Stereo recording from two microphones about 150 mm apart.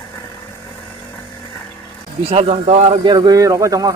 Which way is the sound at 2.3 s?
40° right (ahead or behind).